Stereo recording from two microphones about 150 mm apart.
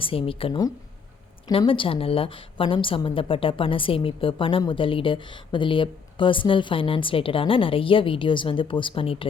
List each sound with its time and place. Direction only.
0.0 s a woman's voice: 35° left (ahead or behind)